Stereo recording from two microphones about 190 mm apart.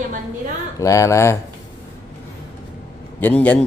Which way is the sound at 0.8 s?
15° left (ahead or behind).